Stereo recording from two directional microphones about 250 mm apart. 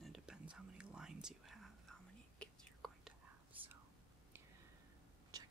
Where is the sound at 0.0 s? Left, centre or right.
Centre.